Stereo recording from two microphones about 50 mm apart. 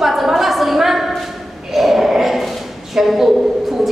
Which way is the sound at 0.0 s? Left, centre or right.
Centre.